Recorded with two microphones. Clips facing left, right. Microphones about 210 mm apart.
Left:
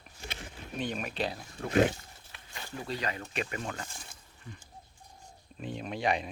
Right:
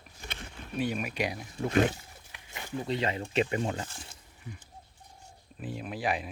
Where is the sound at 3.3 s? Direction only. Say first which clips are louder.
Right 7 dB; 25° right (ahead or behind).